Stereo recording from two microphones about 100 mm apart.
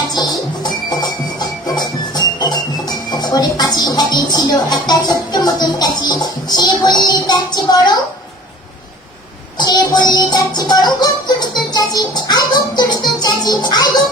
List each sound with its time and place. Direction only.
0.1 s music: 45° left (ahead or behind)
9.6 s music: 45° left (ahead or behind)